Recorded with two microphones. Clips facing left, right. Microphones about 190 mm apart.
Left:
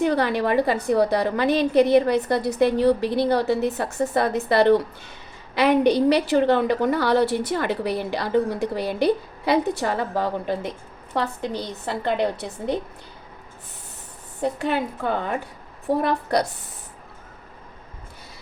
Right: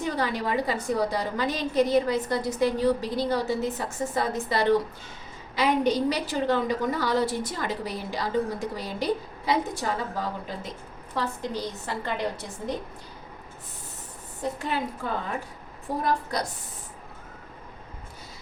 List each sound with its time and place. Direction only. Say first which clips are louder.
0.0 s a woman's voice: left 7 dB; 65° left (ahead or behind)
14.6 s a woman's voice: left 6 dB; 70° left (ahead or behind)